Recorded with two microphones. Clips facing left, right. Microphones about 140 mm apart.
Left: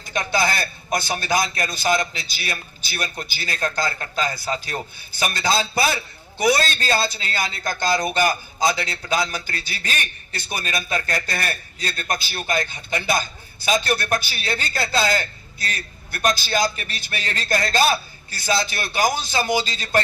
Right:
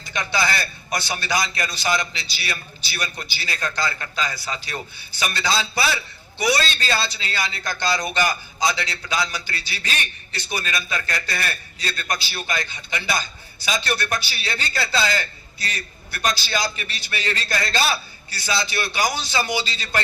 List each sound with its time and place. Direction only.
0.0 s a man's voice: 50° left (ahead or behind)